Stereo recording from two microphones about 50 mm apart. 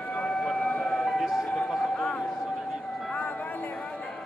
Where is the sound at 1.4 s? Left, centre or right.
Centre.